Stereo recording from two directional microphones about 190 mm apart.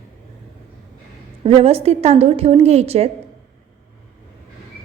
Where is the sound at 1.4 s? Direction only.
30° right (ahead or behind).